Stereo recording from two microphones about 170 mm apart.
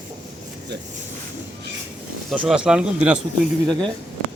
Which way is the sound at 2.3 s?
5° right (ahead or behind).